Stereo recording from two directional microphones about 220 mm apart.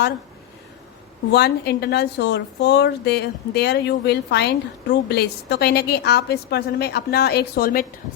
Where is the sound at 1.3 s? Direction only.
50° left (ahead or behind).